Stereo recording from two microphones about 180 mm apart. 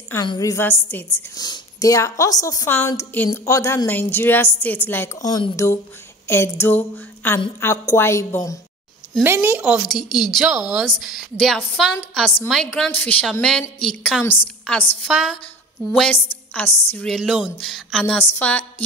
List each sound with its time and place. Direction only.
0.1 s a woman's voice: 20° left (ahead or behind)
9.2 s a woman's voice: 10° right (ahead or behind)
16.5 s a woman's voice: 10° left (ahead or behind)